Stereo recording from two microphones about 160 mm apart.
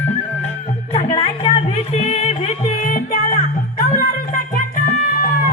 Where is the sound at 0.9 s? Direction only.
40° left (ahead or behind).